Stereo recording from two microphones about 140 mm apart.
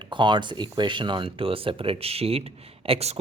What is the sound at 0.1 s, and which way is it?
Speech, 35° right (ahead or behind).